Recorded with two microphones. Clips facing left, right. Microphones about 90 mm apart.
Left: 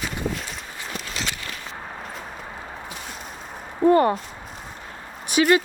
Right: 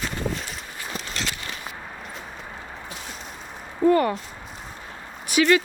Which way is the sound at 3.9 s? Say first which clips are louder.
Left 3 dB; 30° left (ahead or behind).